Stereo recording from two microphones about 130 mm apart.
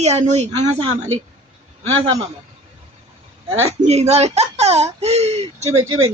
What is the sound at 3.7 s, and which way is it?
Speech, 55° right (ahead or behind).